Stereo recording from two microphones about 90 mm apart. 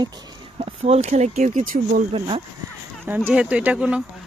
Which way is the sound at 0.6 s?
90° right.